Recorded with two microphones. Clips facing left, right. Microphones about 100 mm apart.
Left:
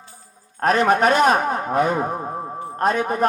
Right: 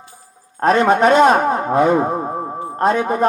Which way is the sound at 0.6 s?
30° right (ahead or behind).